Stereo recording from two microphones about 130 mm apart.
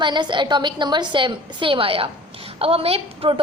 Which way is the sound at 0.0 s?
35° right (ahead or behind).